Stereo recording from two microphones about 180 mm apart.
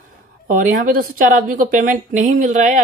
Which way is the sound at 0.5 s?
50° right (ahead or behind).